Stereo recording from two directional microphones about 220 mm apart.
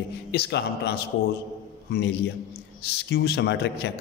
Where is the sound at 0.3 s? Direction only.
50° left (ahead or behind).